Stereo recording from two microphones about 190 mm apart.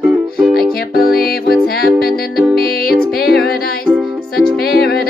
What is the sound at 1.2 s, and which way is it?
Music, 55° left (ahead or behind).